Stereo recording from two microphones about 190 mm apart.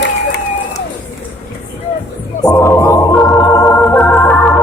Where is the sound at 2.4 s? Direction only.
15° left (ahead or behind).